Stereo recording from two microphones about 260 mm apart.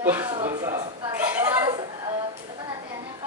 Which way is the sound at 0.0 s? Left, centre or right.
Centre.